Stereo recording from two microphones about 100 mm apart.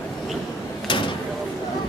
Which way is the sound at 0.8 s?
55° left (ahead or behind).